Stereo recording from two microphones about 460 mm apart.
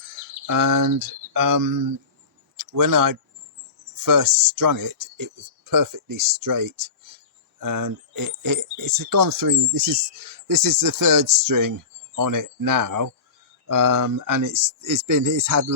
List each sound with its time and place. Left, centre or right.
0.0 s speech: right